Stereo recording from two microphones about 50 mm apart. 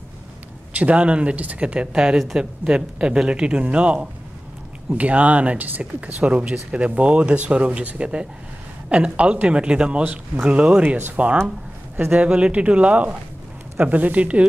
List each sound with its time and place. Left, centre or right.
0.7 s speech: right